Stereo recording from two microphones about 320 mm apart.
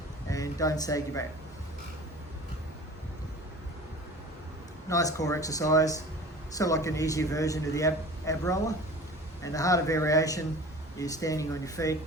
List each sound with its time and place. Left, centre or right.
0.3 s speech: centre
4.9 s a man's voice: centre